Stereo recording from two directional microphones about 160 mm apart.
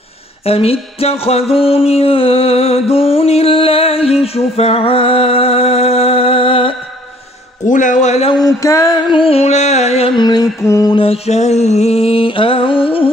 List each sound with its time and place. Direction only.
0.5 s music: 35° left (ahead or behind)
7.6 s a man's voice: 50° left (ahead or behind)
8.5 s music: 20° left (ahead or behind)
11.0 s music: 40° left (ahead or behind)